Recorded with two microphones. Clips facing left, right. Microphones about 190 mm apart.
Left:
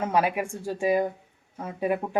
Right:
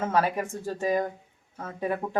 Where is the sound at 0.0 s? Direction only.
15° left (ahead or behind).